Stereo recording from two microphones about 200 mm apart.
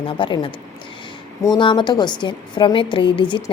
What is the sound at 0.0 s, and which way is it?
A woman's voice, 25° left (ahead or behind).